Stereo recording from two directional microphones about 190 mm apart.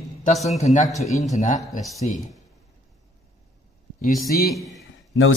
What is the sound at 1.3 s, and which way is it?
Speech, 40° left (ahead or behind).